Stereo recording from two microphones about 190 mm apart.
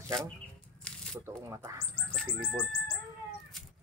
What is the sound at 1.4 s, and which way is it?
Speech, 15° right (ahead or behind).